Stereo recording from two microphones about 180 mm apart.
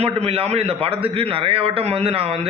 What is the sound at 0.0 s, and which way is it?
A man's voice, 35° right (ahead or behind).